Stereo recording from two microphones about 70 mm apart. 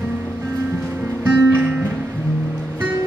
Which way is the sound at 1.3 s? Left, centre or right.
Right.